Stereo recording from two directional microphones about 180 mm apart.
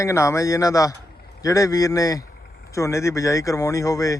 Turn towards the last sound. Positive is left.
turn(degrees=20)  # may be behind; listen again after turning